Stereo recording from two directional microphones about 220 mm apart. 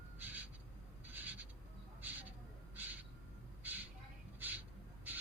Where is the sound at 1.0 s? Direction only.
10° right (ahead or behind).